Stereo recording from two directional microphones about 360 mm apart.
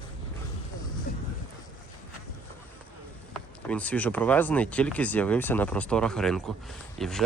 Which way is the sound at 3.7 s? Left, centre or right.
Centre.